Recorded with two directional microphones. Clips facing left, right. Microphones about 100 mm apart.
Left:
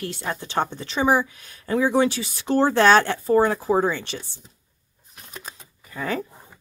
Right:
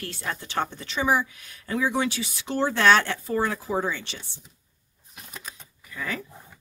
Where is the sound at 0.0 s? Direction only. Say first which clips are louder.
Left 4 dB; 20° left (ahead or behind); by 4.2 s 45° left (ahead or behind).